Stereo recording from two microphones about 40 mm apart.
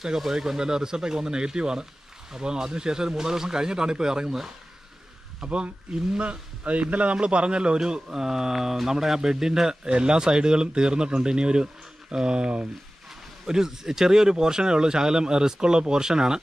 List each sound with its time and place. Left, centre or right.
0.0 s a man's voice: centre
5.4 s a man's voice: right
13.5 s a man's voice: centre